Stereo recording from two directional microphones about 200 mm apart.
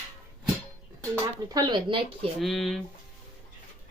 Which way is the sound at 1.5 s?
20° right (ahead or behind).